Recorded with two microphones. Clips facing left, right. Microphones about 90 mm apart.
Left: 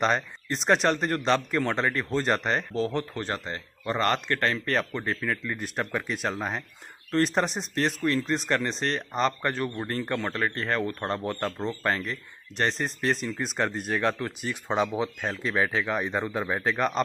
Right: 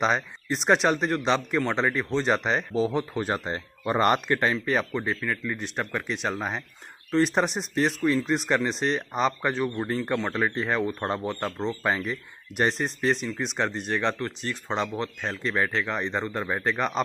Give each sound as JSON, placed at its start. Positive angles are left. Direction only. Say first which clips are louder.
{"t": 0.0, "sound": "speech", "louder": "even", "side_deg": 0}
{"t": 3.3, "sound": "speech", "louder": "right 4 dB", "side_deg": -20}